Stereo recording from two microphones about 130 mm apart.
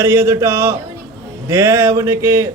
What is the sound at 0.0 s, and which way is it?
A man's voice, 20° right (ahead or behind).